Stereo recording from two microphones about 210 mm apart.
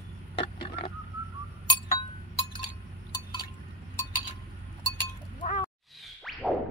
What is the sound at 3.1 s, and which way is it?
Chink, 20° left (ahead or behind).